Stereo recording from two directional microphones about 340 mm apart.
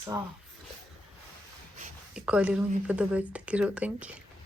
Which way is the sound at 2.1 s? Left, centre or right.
Centre.